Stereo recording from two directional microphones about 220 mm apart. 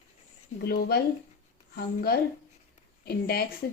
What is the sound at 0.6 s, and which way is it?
A woman's voice, 45° left (ahead or behind).